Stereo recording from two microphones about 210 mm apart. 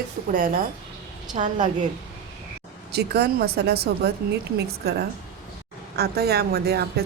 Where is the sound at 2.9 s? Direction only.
50° right (ahead or behind).